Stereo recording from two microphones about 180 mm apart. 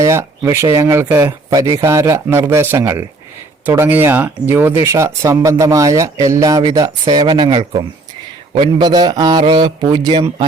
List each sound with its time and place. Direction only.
0.0 s a man's voice: 15° right (ahead or behind)